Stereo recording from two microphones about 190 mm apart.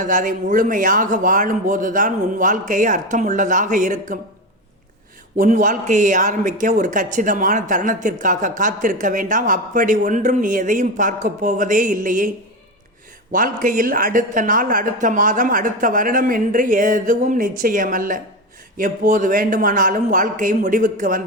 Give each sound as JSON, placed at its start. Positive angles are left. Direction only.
{"t": 0.0, "sound": "speech", "side_deg": -45}
{"t": 5.4, "sound": "speech", "side_deg": -40}
{"t": 13.3, "sound": "speech", "side_deg": -45}